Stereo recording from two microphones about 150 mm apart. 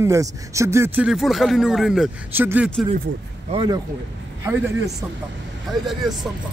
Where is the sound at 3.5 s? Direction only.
35° right (ahead or behind).